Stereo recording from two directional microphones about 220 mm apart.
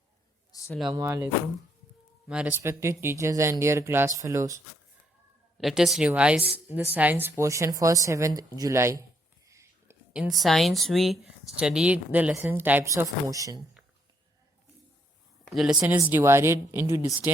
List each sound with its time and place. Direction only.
0.5 s a sound: 15° left (ahead or behind)
0.9 s a woman's voice: 15° right (ahead or behind)
5.5 s a woman's voice: centre (ahead or behind)
15.5 s a woman's voice: 5° right (ahead or behind)